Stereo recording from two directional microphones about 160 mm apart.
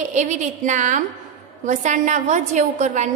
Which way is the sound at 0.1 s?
50° right (ahead or behind).